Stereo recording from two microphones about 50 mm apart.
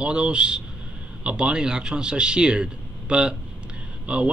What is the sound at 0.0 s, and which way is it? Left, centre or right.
A man's voice, centre.